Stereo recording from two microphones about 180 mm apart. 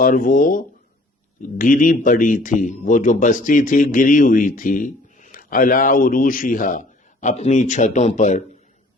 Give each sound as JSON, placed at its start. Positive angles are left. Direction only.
{"t": 0.0, "sound": "speech", "side_deg": 50}